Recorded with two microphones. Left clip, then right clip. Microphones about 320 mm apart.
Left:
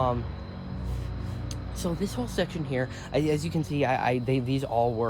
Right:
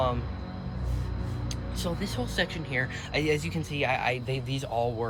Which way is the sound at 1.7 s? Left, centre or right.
Left.